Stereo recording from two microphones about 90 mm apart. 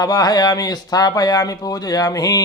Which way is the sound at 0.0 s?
45° left (ahead or behind).